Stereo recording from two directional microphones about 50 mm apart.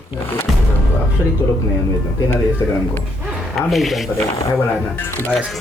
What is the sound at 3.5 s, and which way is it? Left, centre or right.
Speech, centre.